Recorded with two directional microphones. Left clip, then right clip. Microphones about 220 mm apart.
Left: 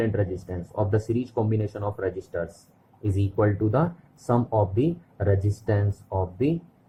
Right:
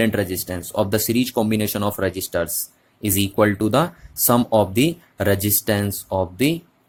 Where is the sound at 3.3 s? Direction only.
80° right.